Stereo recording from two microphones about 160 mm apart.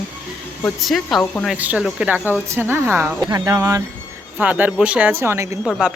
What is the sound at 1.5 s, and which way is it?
Speech, 10° right (ahead or behind).